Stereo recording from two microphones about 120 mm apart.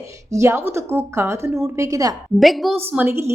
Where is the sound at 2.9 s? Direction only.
15° right (ahead or behind).